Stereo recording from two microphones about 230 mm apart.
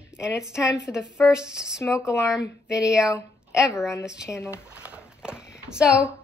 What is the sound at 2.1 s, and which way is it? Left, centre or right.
Speech, left.